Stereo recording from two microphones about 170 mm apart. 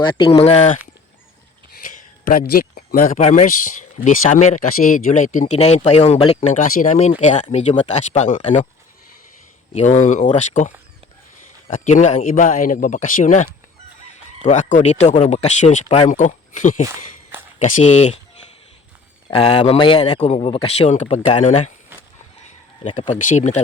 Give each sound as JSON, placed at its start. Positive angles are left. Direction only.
{"t": 0.0, "sound": "speech", "side_deg": 30}
{"t": 2.2, "sound": "a man's voice", "side_deg": 55}
{"t": 3.2, "sound": "speech", "side_deg": 40}
{"t": 9.7, "sound": "speech", "side_deg": 45}
{"t": 11.7, "sound": "speech", "side_deg": 45}
{"t": 19.3, "sound": "speech", "side_deg": 35}
{"t": 23.0, "sound": "speech", "side_deg": 45}